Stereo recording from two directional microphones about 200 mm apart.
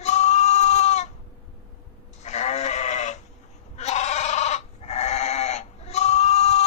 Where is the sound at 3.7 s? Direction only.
35° left (ahead or behind).